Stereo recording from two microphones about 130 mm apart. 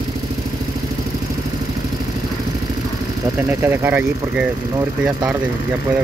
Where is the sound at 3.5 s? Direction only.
20° right (ahead or behind).